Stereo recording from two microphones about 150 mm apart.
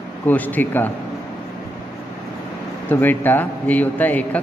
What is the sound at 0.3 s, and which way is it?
Speech, 10° left (ahead or behind).